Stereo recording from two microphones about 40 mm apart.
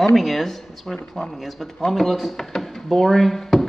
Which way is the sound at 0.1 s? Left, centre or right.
Centre.